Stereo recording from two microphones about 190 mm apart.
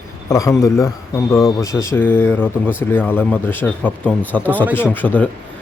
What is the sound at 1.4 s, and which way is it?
Speech, centre (ahead or behind).